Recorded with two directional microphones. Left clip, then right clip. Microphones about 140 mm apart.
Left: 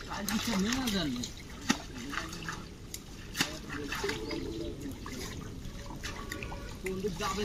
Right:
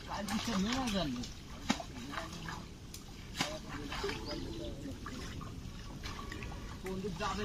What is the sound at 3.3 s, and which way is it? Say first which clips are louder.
Dog: left 4 dB; centre (ahead or behind).